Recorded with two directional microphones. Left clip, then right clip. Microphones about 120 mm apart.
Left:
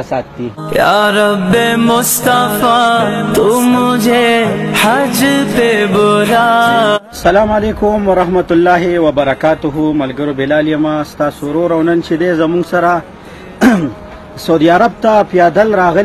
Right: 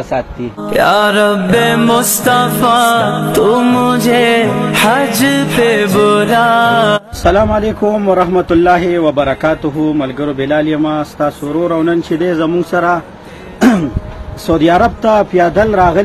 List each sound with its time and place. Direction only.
0.7 s music: centre (ahead or behind)
7.4 s a man's voice: 15° left (ahead or behind)
13.6 s throat clearing: 30° left (ahead or behind)
14.4 s a man's voice: 25° left (ahead or behind)